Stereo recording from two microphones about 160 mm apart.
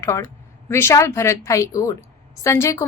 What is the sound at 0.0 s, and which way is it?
A woman's voice, 15° left (ahead or behind).